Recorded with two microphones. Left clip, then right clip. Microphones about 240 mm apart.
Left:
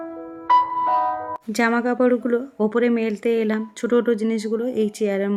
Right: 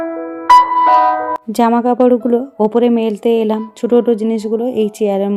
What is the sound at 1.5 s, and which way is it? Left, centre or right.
Speech, centre.